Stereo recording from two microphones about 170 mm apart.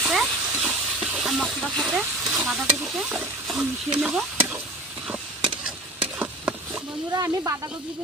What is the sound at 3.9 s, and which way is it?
Stir, centre (ahead or behind).